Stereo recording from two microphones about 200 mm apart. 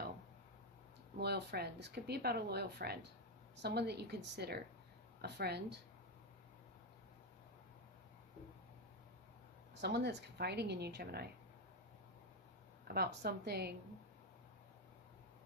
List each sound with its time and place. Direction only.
1.2 s speech: 55° right (ahead or behind)
9.8 s speech: 60° right (ahead or behind)
12.9 s a woman's voice: 55° right (ahead or behind)